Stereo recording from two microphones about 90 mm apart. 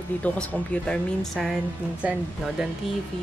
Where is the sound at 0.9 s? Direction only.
5° left (ahead or behind).